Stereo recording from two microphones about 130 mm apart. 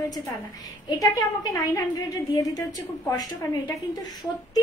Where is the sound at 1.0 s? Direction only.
25° left (ahead or behind).